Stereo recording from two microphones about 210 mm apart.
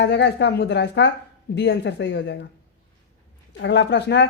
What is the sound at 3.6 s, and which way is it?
Speech, 55° left (ahead or behind).